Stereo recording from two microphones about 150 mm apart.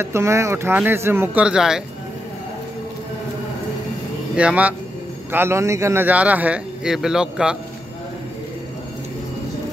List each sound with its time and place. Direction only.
0.0 s speech: 20° right (ahead or behind)
4.4 s speech: 10° right (ahead or behind)